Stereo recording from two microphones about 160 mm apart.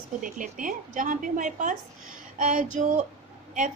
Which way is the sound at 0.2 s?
55° right (ahead or behind).